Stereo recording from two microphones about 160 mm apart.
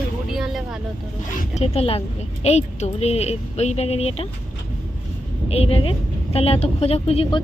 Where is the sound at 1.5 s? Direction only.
40° left (ahead or behind).